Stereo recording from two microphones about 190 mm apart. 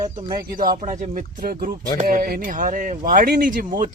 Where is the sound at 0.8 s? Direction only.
40° right (ahead or behind).